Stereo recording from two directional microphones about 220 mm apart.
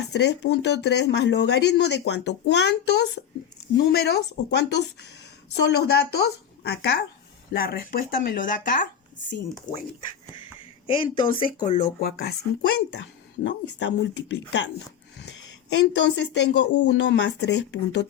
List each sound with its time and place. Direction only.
0.1 s speech: 50° left (ahead or behind)
10.8 s a woman's voice: 25° left (ahead or behind); by 14.7 s 55° left (ahead or behind)
15.7 s speech: 55° left (ahead or behind)